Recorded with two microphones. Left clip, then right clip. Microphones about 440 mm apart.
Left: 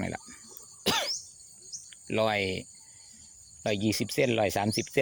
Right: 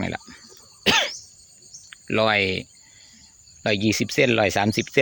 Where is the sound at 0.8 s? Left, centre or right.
Left.